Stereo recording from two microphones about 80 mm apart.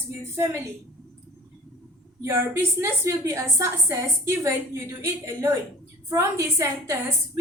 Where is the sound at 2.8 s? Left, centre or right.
Right.